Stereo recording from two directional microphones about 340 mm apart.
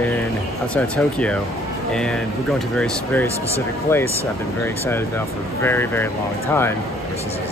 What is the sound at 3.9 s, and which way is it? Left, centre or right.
Speech, centre.